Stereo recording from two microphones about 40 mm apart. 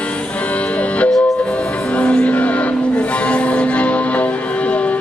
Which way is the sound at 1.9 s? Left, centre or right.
Left.